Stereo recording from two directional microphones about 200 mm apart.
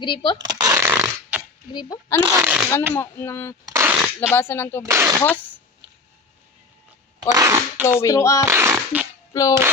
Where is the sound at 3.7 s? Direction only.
10° right (ahead or behind).